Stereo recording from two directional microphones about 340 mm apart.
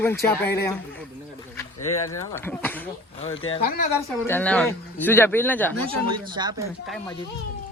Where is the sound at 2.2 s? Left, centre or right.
Centre.